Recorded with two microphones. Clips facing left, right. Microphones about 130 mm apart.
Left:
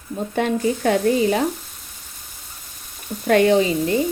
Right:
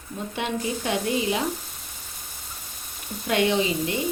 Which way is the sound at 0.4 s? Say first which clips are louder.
Left 8 dB; 45° left (ahead or behind).